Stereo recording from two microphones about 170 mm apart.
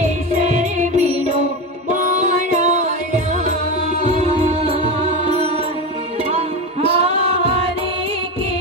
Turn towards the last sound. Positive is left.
turn(degrees=-35)  # may be behind; listen again after turning